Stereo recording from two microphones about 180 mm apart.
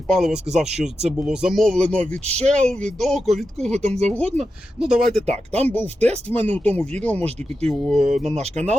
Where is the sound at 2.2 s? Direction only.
40° right (ahead or behind).